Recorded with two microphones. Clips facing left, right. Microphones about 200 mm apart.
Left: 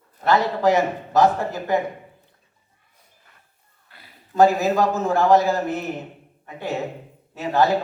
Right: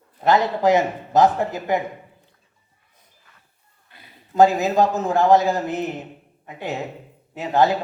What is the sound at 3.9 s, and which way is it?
A man's voice, 20° right (ahead or behind).